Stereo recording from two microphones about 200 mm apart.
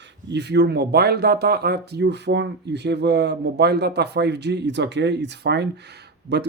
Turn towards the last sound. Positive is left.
turn(degrees=-60)  # may be behind; listen again after turning